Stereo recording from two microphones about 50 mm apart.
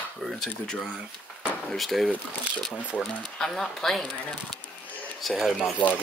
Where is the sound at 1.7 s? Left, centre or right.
Centre.